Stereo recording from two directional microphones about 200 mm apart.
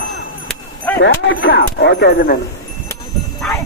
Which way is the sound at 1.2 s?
65° left (ahead or behind).